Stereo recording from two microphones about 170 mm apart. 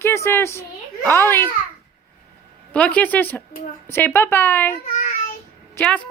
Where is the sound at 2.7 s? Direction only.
5° left (ahead or behind).